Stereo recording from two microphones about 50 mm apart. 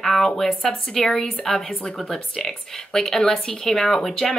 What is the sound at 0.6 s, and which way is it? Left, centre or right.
Speech, centre.